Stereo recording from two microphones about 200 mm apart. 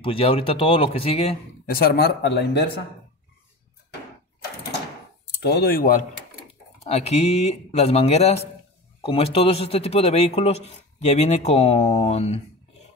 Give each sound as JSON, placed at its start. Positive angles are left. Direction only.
{"t": 0.0, "sound": "a man's voice", "side_deg": 25}
{"t": 1.7, "sound": "speech", "side_deg": 50}
{"t": 5.4, "sound": "speech", "side_deg": 55}
{"t": 6.8, "sound": "a man's voice", "side_deg": 30}